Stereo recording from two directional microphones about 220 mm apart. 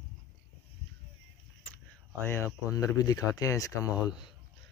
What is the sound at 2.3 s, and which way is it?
Speech, 15° left (ahead or behind).